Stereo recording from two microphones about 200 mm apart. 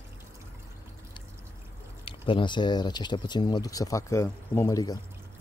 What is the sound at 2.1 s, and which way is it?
Speech, 25° left (ahead or behind).